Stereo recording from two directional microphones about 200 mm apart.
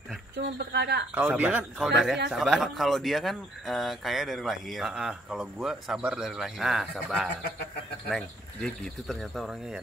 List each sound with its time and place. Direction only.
0.4 s speech: 55° right (ahead or behind)
1.1 s speech: 10° right (ahead or behind)
8.6 s speech: centre (ahead or behind)